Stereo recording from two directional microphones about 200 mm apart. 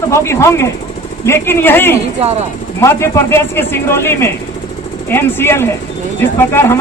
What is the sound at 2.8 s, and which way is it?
Speech, 15° left (ahead or behind).